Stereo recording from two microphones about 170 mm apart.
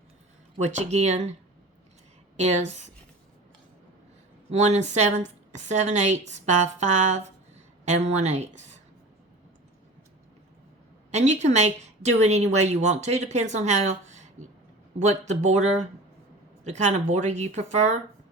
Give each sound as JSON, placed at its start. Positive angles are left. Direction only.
{"t": 0.6, "sound": "a woman's voice", "side_deg": -40}
{"t": 4.5, "sound": "a woman's voice", "side_deg": -40}
{"t": 11.1, "sound": "a woman's voice", "side_deg": -40}